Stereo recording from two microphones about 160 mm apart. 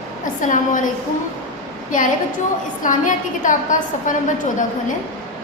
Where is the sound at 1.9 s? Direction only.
55° left (ahead or behind).